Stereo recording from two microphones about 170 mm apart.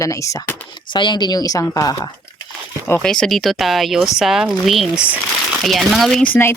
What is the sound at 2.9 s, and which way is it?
Speech, 5° left (ahead or behind).